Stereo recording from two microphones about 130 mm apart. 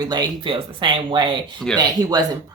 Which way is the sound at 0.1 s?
35° right (ahead or behind).